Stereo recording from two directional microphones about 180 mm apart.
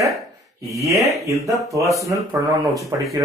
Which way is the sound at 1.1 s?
15° right (ahead or behind).